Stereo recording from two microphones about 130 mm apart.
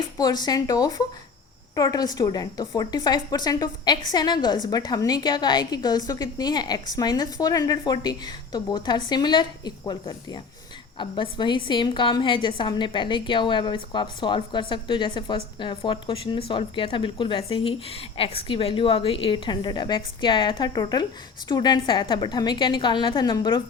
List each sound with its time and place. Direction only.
0.2 s a woman's voice: 30° left (ahead or behind)